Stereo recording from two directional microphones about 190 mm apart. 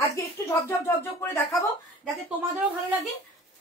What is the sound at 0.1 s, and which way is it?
Speech, 15° left (ahead or behind).